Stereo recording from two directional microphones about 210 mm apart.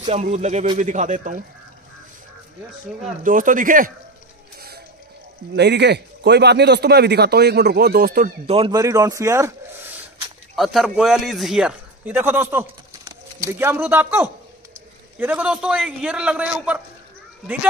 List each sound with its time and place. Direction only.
0.0 s speech: 30° right (ahead or behind)
3.3 s speech: 40° right (ahead or behind)
5.6 s a man's voice: 55° right (ahead or behind)
8.5 s speech: 25° right (ahead or behind)
10.5 s a man's voice: centre (ahead or behind)